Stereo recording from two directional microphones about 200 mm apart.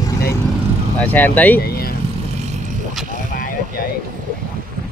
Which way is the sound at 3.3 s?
45° left (ahead or behind).